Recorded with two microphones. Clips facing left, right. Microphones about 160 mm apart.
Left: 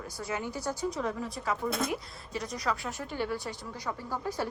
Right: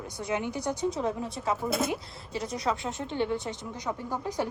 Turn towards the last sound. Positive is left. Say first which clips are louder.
# right 2 dB
turn(degrees=-15)  # may be behind; listen again after turning